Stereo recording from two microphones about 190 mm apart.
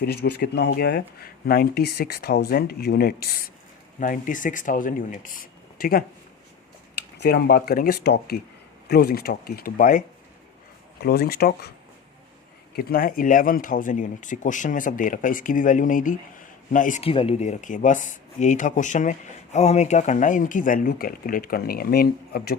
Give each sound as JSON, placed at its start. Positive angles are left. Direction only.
{"t": 0.0, "sound": "speech", "side_deg": 60}
{"t": 7.2, "sound": "speech", "side_deg": 55}
{"t": 11.0, "sound": "speech", "side_deg": 55}
{"t": 12.7, "sound": "speech", "side_deg": 50}